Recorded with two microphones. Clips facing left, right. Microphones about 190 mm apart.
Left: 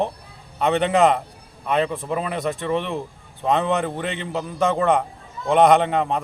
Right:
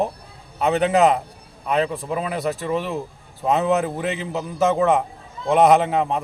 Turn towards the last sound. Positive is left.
turn(degrees=-5)  # may be behind; listen again after turning